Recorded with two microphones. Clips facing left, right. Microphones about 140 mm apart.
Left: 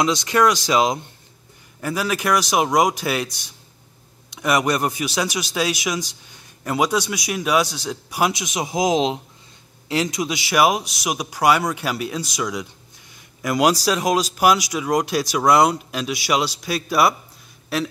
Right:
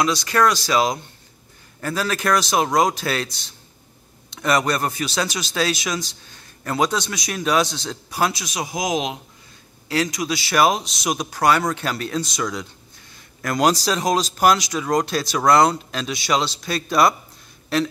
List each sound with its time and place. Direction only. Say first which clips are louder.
0.0 s speech: left 1 dB; 20° left (ahead or behind)